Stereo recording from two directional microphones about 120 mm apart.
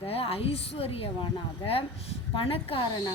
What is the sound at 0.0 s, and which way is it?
A woman's voice, 55° left (ahead or behind).